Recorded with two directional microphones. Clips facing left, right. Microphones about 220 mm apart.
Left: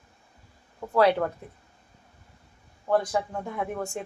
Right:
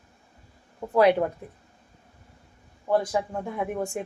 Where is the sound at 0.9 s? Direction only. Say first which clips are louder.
Right 2 dB; 15° right (ahead or behind).